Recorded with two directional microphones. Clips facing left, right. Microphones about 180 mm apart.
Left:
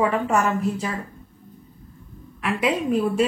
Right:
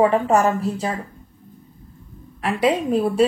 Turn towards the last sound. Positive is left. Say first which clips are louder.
# right 3 dB
turn(degrees=-35)  # may be behind; listen again after turning